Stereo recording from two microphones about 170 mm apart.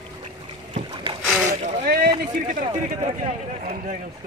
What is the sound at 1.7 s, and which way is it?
Speech, 65° right (ahead or behind).